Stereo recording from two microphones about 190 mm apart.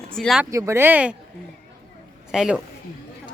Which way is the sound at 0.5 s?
15° right (ahead or behind).